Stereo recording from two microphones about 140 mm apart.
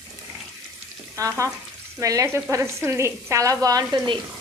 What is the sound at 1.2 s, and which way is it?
Speech, 20° right (ahead or behind).